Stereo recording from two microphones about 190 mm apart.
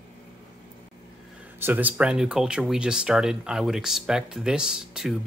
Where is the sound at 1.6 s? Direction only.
10° right (ahead or behind).